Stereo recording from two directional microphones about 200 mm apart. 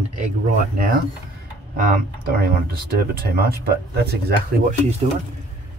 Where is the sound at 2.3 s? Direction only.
50° right (ahead or behind).